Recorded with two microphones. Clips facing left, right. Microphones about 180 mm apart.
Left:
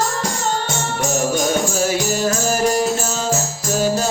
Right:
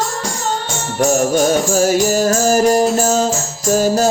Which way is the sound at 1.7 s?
45° right (ahead or behind).